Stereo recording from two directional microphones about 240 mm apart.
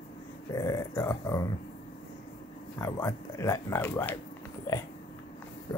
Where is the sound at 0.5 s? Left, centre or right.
Centre.